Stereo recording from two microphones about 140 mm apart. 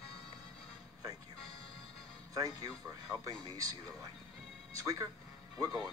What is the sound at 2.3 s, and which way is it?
Speech, 25° right (ahead or behind).